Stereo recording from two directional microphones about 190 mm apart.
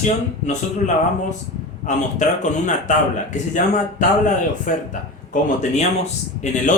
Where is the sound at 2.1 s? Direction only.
40° left (ahead or behind).